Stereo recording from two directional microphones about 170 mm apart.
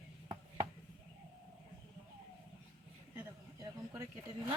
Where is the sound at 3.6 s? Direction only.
20° right (ahead or behind).